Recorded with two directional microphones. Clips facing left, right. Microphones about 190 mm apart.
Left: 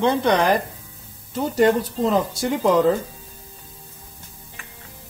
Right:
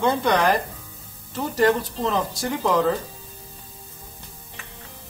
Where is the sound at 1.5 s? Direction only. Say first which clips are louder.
Left 2 dB; 25° left (ahead or behind).